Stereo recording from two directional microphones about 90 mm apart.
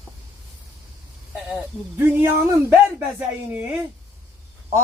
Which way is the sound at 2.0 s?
25° right (ahead or behind).